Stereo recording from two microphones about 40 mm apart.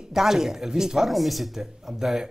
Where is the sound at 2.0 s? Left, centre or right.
Centre.